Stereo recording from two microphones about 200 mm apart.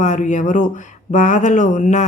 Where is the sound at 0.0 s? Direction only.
40° left (ahead or behind).